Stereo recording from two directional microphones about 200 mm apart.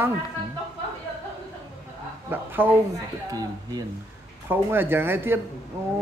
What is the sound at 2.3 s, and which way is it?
A man's voice, 10° right (ahead or behind).